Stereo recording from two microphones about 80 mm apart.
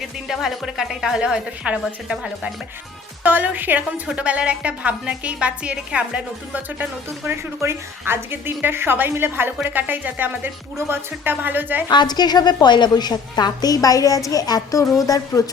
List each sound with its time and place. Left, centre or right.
0.0 s a woman's voice: centre
3.2 s a woman's voice: centre
7.3 s a woman's voice: right
11.9 s a woman's voice: left